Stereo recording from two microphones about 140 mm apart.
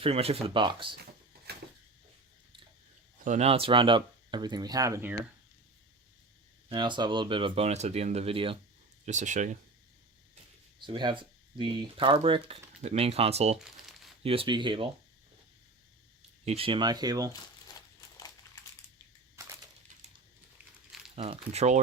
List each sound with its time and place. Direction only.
0.0 s speech: 45° right (ahead or behind)
3.2 s speech: 50° right (ahead or behind); by 5.1 s 20° right (ahead or behind)
6.7 s speech: 35° right (ahead or behind)
9.0 s speech: 60° right (ahead or behind)
10.8 s speech: 35° right (ahead or behind)
16.5 s speech: 40° right (ahead or behind)
21.2 s speech: 45° right (ahead or behind)